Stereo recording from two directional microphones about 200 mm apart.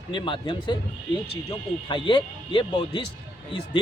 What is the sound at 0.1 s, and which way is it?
Speech, 25° left (ahead or behind).